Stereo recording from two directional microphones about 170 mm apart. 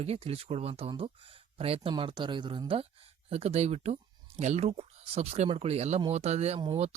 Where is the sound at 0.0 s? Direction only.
35° right (ahead or behind).